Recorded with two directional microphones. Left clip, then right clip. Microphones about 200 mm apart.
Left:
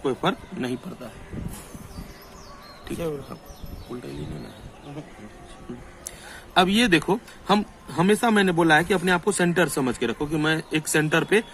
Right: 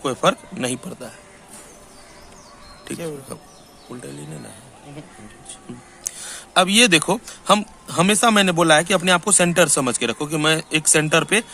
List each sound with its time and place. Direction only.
0.0 s speech: 40° right (ahead or behind)
2.9 s speech: 30° right (ahead or behind)
6.1 s speech: 40° right (ahead or behind)